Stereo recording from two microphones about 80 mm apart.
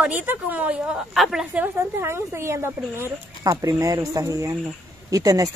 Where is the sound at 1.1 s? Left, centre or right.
Centre.